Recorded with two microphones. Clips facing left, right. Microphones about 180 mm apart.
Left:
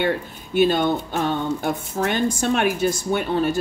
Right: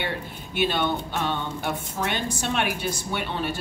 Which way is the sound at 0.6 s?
40° left (ahead or behind).